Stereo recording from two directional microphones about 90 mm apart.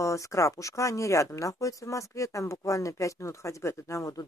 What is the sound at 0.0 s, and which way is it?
Speech, 35° left (ahead or behind).